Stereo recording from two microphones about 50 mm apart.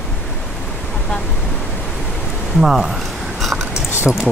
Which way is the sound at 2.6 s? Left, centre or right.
Centre.